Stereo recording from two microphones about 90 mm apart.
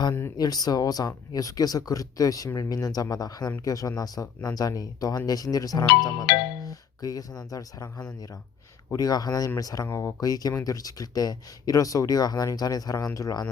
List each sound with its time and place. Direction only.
0.3 s speech: 45° left (ahead or behind)
9.8 s speech: 30° left (ahead or behind)
10.2 s speech: 45° left (ahead or behind)